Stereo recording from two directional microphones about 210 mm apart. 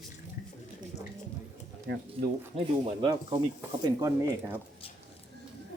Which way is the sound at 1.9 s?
55° right (ahead or behind).